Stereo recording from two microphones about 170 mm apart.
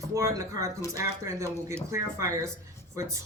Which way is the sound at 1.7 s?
15° right (ahead or behind).